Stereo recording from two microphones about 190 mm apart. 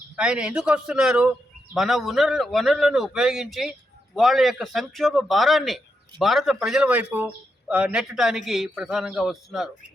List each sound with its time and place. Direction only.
0.2 s a man's voice: 5° right (ahead or behind)